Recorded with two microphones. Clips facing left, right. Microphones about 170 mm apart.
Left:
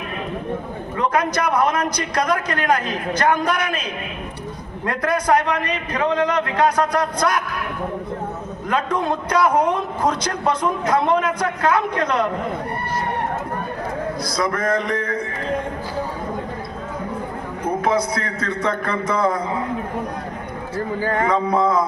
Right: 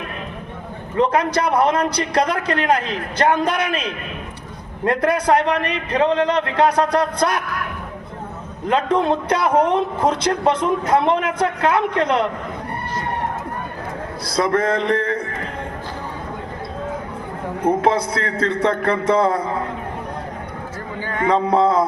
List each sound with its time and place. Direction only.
0.9 s a man's voice: 30° right (ahead or behind)
4.9 s a man's voice: 30° right (ahead or behind)
8.6 s a man's voice: 25° right (ahead or behind)
14.3 s a man's voice: 30° right (ahead or behind)
17.8 s a man's voice: 30° right (ahead or behind)
20.7 s a sound: 40° left (ahead or behind)
21.2 s a sound: 30° right (ahead or behind)